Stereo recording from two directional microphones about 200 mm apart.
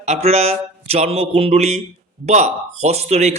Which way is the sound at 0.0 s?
30° right (ahead or behind).